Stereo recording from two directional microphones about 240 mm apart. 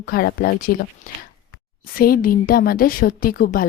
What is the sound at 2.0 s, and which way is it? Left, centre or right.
A woman's voice, left.